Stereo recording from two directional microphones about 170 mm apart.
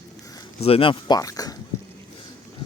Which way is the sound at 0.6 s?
35° left (ahead or behind).